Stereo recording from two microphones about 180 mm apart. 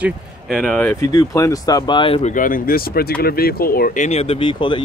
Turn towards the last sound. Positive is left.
turn(degrees=25)  # may be behind; listen again after turning